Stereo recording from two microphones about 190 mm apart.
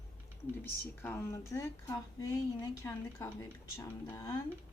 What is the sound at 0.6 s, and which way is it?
Speech, 10° left (ahead or behind).